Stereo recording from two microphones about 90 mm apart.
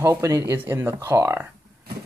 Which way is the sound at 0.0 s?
35° right (ahead or behind).